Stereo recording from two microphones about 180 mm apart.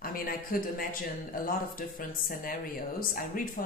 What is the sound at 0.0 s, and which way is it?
Speech, 50° left (ahead or behind).